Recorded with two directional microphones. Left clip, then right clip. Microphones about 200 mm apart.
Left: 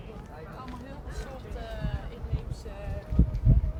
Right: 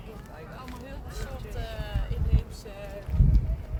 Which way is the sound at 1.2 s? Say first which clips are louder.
Right 2 dB; 50° right (ahead or behind).